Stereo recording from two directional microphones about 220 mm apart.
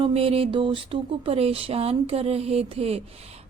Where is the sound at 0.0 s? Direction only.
25° right (ahead or behind).